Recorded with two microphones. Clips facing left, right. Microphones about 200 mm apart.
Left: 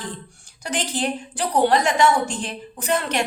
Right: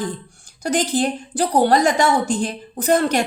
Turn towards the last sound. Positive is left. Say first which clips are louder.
# right 6 dB
turn(degrees=-40)  # may be behind; listen again after turning